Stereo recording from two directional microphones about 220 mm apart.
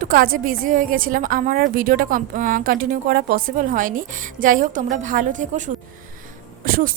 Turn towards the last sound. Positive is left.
turn(degrees=-40)  # may be behind; listen again after turning